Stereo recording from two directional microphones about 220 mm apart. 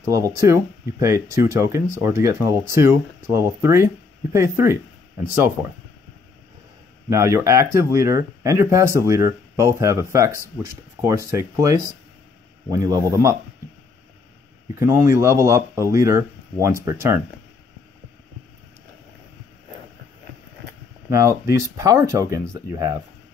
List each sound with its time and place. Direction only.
0.0 s speech: 15° right (ahead or behind)
7.1 s speech: 15° right (ahead or behind)
14.8 s speech: 10° right (ahead or behind)
21.1 s speech: 15° right (ahead or behind)